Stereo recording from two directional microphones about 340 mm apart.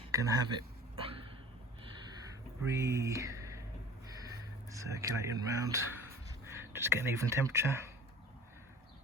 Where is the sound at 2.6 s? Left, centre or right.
Centre.